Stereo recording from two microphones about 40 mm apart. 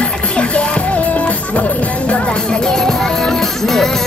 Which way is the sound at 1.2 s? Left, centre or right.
Left.